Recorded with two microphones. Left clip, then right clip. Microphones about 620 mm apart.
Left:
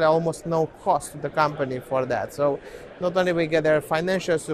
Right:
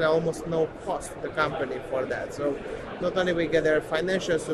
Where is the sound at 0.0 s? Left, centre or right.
Left.